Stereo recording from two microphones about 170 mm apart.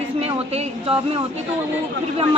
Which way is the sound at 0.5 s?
35° right (ahead or behind).